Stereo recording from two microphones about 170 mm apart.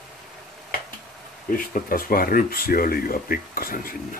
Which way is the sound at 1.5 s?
55° left (ahead or behind).